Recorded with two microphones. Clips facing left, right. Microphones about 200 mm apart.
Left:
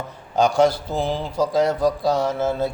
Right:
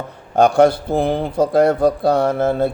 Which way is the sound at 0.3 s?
55° right (ahead or behind).